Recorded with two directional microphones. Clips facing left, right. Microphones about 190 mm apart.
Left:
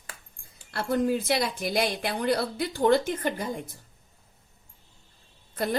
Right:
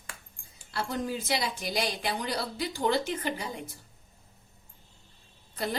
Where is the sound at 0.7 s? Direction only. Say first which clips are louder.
Left 7 dB; 55° left (ahead or behind).